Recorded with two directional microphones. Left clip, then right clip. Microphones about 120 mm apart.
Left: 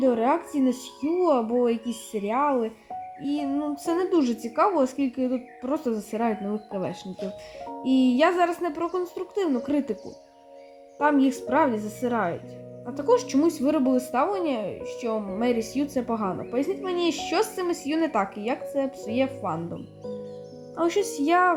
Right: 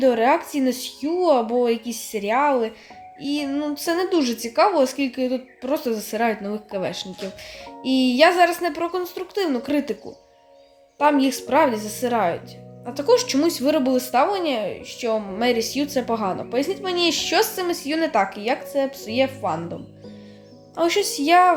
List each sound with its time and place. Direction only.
0.0 s a woman's voice: 35° left (ahead or behind)
10.9 s a woman's voice: 35° left (ahead or behind)
20.7 s a woman's voice: 35° left (ahead or behind)